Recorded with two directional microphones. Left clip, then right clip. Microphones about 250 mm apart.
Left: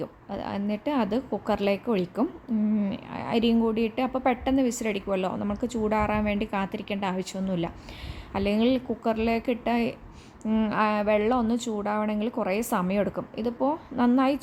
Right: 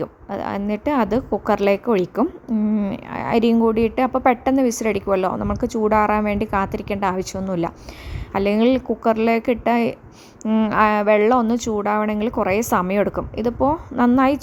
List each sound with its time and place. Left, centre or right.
0.0 s a woman's voice: right